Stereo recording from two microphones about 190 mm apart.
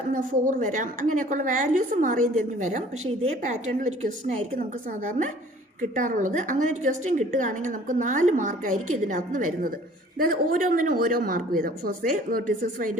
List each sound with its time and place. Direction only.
0.1 s a woman's voice: 45° right (ahead or behind)